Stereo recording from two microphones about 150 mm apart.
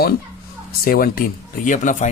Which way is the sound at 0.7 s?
80° left.